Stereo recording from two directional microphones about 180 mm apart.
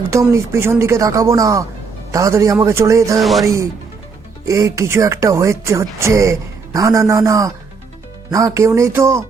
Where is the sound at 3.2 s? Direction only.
Centre (ahead or behind).